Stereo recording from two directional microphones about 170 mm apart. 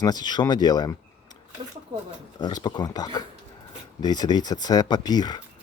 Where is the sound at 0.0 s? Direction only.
25° left (ahead or behind).